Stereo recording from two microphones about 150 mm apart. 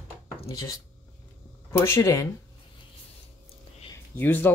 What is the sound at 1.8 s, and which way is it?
Speech, 20° left (ahead or behind).